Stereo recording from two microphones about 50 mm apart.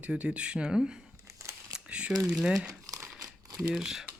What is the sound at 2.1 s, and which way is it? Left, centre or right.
Speech, centre.